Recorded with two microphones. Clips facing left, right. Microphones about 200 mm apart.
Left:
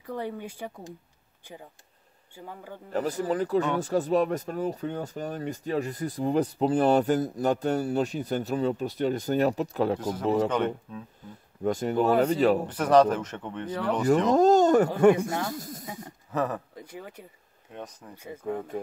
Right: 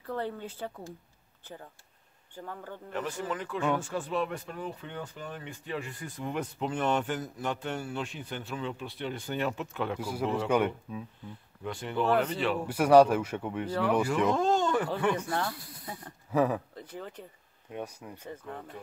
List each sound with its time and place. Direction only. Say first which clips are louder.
0.0 s speech: left 1 dB; 15° left (ahead or behind)
2.3 s speech: even; 10° left (ahead or behind)
2.9 s speech: left 7 dB; 35° left (ahead or behind)
9.9 s speech: left 4 dB; 10° right (ahead or behind)
10.2 s speech: left 6 dB; 40° left (ahead or behind)
10.9 s speech: right 1 dB; 10° right (ahead or behind)
11.6 s speech: left 6 dB; 40° left (ahead or behind)
12.6 s speech: even; 10° right (ahead or behind)
14.0 s speech: left 7 dB; 40° left (ahead or behind)
16.3 s speech: right 2 dB; 10° right (ahead or behind)
16.7 s speech: even; 10° left (ahead or behind)
17.7 s speech: right 2 dB; 10° right (ahead or behind)
18.1 s speech: left 2 dB; 10° left (ahead or behind)